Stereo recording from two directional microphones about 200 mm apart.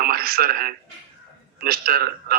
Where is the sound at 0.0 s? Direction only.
50° right (ahead or behind).